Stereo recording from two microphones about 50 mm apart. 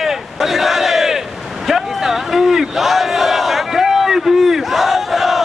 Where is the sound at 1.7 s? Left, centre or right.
Centre.